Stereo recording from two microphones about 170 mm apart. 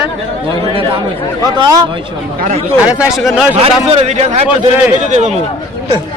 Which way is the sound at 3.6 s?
35° right (ahead or behind).